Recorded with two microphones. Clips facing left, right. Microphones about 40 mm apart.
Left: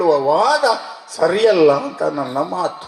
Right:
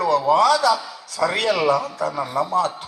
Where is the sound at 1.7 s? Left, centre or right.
Left.